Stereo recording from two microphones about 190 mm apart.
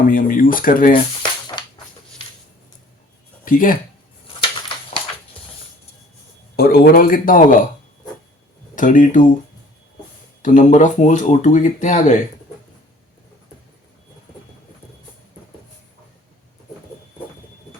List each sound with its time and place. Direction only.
0.1 s speech: 45° left (ahead or behind)
3.4 s speech: 45° left (ahead or behind)
6.6 s speech: 55° left (ahead or behind)
8.7 s speech: 45° left (ahead or behind)
10.4 s speech: 40° left (ahead or behind)